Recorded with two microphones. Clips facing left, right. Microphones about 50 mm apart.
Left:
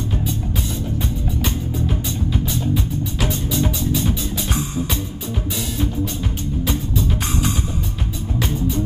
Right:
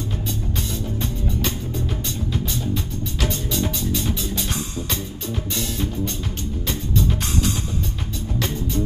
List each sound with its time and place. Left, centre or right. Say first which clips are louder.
1.4 s music: left 3 dB; centre
8.4 s music: left 3 dB; centre